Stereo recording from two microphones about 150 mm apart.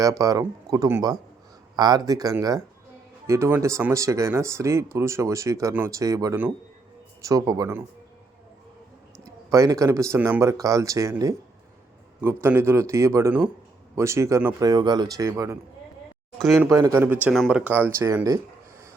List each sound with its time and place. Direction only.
0.0 s speech: 25° right (ahead or behind)
9.2 s speech: 20° right (ahead or behind)
16.6 s speech: 20° right (ahead or behind)